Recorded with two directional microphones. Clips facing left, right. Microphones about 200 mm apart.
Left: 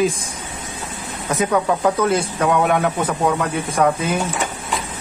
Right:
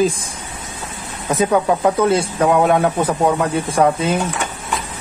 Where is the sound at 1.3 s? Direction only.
30° right (ahead or behind).